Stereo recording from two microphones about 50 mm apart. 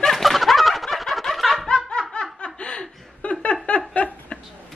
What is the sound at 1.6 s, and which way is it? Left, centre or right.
Laughter, centre.